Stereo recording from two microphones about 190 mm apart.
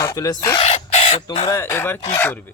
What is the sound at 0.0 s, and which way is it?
Speech, 20° left (ahead or behind).